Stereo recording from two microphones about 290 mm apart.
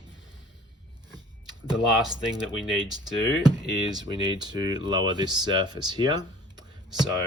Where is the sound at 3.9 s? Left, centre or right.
Centre.